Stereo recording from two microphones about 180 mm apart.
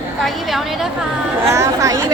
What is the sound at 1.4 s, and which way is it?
Chatter, 15° right (ahead or behind).